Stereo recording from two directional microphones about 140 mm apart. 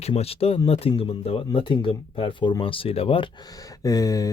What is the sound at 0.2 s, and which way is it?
Speech, 45° left (ahead or behind).